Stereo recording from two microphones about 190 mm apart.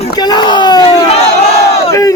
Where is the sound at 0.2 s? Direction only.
20° left (ahead or behind).